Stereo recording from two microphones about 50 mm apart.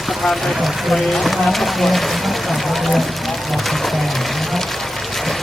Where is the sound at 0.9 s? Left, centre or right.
Centre.